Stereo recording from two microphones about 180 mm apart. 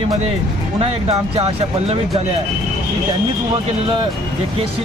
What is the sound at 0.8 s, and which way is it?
Speech, 35° right (ahead or behind).